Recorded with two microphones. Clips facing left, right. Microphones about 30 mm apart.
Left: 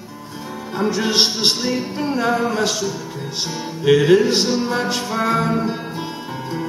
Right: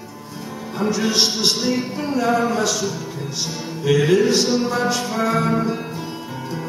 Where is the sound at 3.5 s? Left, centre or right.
Centre.